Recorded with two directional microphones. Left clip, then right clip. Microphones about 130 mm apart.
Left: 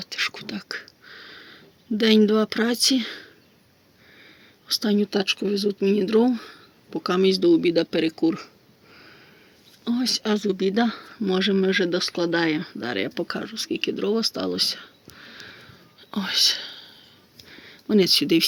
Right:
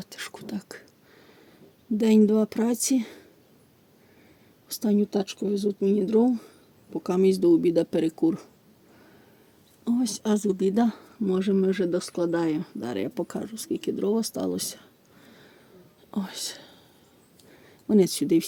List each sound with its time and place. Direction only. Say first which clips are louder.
0.1 s whispering: left 10 dB; 55° right (ahead or behind)
0.8 s a sound: left 11 dB; 25° right (ahead or behind)
2.0 s speech: left 3 dB; 25° right (ahead or behind)
4.7 s speech: left 4 dB; 30° right (ahead or behind)
4.9 s speech: left 4 dB; 5° right (ahead or behind)
7.1 s speech: left 2 dB; 30° right (ahead or behind); by 8.4 s 45° right (ahead or behind)
9.8 s speech: left 3 dB; 30° right (ahead or behind)
11.2 s speech: left 3 dB; 10° right (ahead or behind); by 14.7 s 35° right (ahead or behind)
15.2 s whispering: left 11 dB; 20° right (ahead or behind)
17.5 s a sound: left 1 dB; 30° right (ahead or behind)